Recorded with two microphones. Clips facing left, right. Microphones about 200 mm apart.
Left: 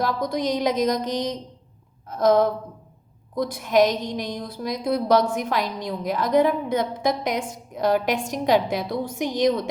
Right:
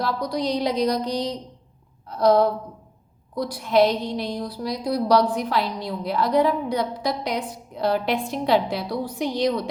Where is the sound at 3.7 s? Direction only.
15° left (ahead or behind).